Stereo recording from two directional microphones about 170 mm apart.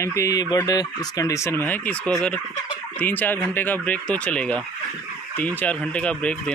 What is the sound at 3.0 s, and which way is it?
Speech, 10° left (ahead or behind).